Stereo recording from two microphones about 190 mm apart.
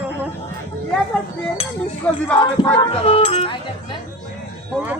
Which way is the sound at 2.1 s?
5° left (ahead or behind).